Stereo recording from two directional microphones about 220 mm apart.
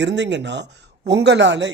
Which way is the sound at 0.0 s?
55° right (ahead or behind).